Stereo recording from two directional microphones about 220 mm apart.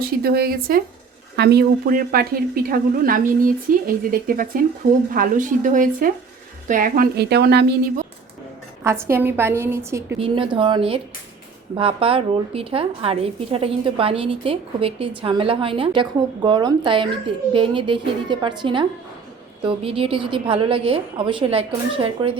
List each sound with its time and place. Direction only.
0.2 s a woman's voice: 45° right (ahead or behind)
8.8 s a woman's voice: 10° right (ahead or behind)
10.2 s a woman's voice: 25° right (ahead or behind)